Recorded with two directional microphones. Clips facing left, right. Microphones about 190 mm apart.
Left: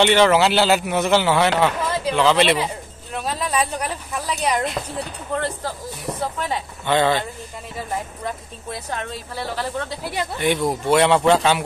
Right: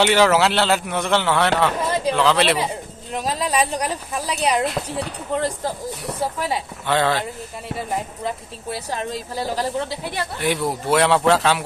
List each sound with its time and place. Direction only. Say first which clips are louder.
0.0 s a man's voice: left 1 dB; 5° right (ahead or behind)
3.2 s a woman's voice: right 2 dB; 35° right (ahead or behind)
4.3 s a man's voice: right 1 dB; 10° right (ahead or behind)
8.9 s a woman's voice: right 3 dB; 40° right (ahead or behind)
10.4 s a man's voice: left 2 dB; 5° right (ahead or behind)